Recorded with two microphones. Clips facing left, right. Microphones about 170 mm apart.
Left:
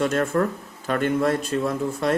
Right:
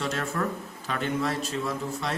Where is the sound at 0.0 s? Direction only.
50° left (ahead or behind).